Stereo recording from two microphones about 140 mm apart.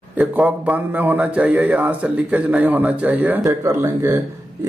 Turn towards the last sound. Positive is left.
turn(degrees=-20)  # may be behind; listen again after turning